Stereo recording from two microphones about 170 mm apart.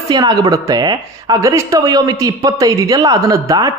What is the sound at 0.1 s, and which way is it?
A man's voice, 25° right (ahead or behind).